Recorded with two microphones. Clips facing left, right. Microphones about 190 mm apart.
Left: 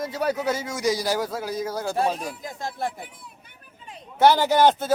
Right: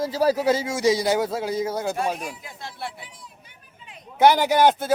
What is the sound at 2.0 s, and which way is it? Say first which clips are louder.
Speech: left 1 dB; 10° right (ahead or behind).